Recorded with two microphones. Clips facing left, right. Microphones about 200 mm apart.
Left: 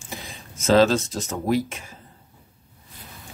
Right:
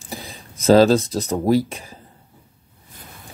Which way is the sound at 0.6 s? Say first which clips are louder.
Right 4 dB; 35° right (ahead or behind).